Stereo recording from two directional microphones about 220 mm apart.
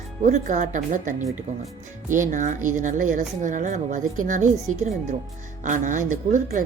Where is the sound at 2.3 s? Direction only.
35° right (ahead or behind).